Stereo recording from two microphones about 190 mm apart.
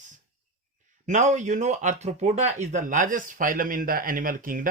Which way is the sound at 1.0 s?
40° right (ahead or behind).